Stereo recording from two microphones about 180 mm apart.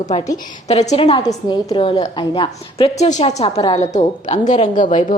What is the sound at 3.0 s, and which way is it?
Speech, 40° left (ahead or behind).